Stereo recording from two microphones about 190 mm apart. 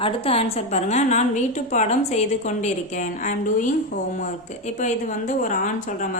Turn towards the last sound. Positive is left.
turn(degrees=45)  # may be behind; listen again after turning